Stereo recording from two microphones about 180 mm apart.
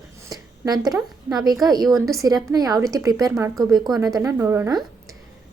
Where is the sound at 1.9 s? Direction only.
20° right (ahead or behind).